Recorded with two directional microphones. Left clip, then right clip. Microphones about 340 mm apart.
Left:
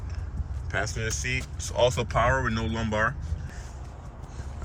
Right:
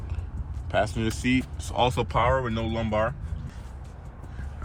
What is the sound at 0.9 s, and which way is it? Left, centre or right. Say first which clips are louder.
Speech: right 1 dB; centre.